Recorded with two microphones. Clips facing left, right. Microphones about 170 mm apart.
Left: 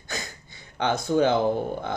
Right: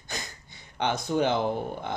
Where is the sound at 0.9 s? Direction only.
35° left (ahead or behind).